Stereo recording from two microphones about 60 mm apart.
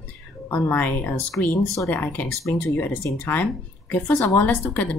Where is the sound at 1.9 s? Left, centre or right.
Left.